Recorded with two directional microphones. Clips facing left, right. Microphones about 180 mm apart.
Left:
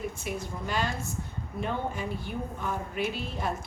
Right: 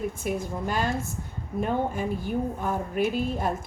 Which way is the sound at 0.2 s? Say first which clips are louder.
Right 6 dB; 50° right (ahead or behind).